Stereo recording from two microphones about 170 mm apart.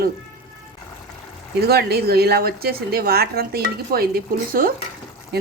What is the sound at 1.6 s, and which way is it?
A woman's voice, 70° right (ahead or behind).